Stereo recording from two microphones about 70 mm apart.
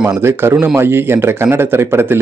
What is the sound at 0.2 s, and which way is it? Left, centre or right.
A man's voice, right.